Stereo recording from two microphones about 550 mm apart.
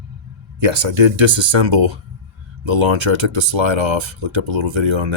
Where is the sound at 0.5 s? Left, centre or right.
Right.